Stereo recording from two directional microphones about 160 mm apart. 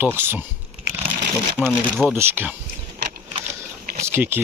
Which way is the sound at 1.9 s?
Centre (ahead or behind).